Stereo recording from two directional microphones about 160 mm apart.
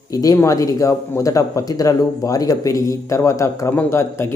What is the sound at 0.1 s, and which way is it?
Speech, 20° left (ahead or behind).